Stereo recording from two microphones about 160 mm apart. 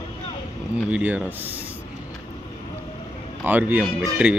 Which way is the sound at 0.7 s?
10° right (ahead or behind).